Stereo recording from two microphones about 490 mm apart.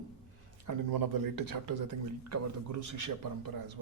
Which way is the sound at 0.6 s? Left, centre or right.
Right.